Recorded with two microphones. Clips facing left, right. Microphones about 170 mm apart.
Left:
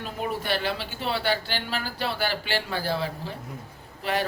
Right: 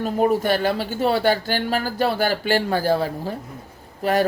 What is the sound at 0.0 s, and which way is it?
Speech, 45° right (ahead or behind).